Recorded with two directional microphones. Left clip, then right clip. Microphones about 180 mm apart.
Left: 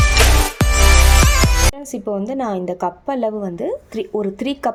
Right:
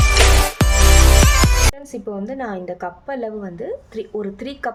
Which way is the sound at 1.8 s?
40° left (ahead or behind).